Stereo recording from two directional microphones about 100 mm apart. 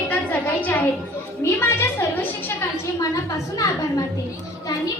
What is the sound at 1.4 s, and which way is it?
Speech, 25° left (ahead or behind).